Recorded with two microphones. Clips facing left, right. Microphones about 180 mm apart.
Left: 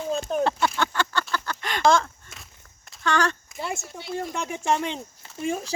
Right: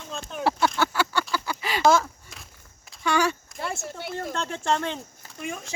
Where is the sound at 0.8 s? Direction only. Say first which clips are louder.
Right 1 dB; 5° right (ahead or behind).